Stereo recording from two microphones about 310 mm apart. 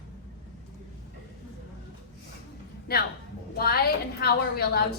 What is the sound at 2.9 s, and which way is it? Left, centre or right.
A woman's voice, left.